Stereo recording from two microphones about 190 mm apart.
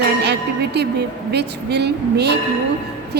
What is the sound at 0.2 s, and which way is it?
Music, 60° right (ahead or behind).